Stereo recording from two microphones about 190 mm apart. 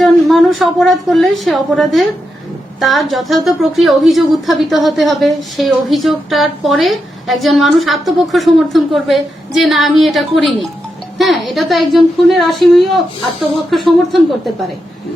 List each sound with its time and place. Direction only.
0.0 s speech: centre (ahead or behind)